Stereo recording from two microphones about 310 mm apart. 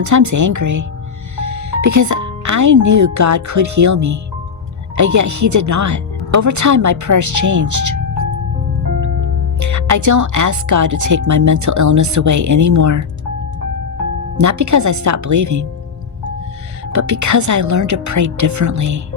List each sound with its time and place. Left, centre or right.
0.0 s speech: right
9.6 s speech: right
14.3 s speech: right
16.9 s speech: right